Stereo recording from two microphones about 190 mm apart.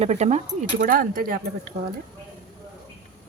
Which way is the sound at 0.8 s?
45° right (ahead or behind).